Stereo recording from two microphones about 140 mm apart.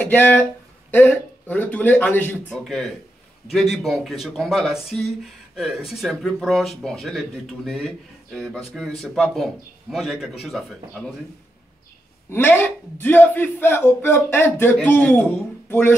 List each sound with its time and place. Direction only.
0.0 s speech: 10° left (ahead or behind)
10.4 s speech: 10° left (ahead or behind)
12.3 s speech: 15° left (ahead or behind)